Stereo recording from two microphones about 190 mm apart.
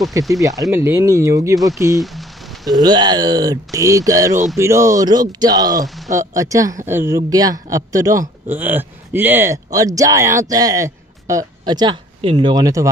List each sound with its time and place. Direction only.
0.3 s speech: 15° right (ahead or behind)
2.0 s a sound: centre (ahead or behind)
2.8 s speech: 20° right (ahead or behind)